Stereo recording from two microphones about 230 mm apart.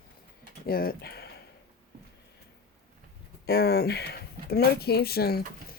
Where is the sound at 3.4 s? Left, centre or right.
Left.